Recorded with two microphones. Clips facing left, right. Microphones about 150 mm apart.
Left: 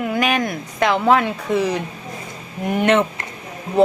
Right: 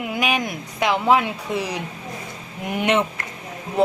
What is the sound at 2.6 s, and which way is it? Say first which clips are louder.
Speech: left 5 dB; 40° left (ahead or behind).